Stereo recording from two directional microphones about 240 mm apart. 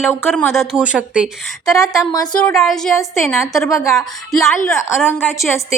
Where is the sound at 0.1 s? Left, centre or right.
Centre.